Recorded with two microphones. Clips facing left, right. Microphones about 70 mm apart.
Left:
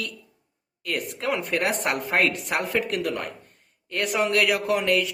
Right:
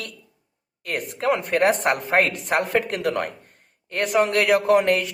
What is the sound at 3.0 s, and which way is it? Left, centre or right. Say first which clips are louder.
Speech: right 5 dB; right.